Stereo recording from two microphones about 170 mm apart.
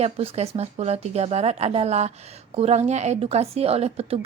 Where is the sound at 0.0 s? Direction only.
35° right (ahead or behind).